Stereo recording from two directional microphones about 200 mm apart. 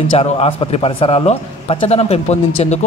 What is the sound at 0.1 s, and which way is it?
A man's voice, 30° left (ahead or behind).